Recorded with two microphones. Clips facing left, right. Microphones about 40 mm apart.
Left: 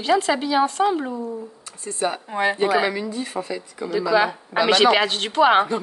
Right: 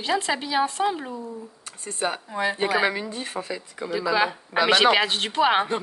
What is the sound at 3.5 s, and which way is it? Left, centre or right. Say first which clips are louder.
A woman's voice: left 4 dB; centre.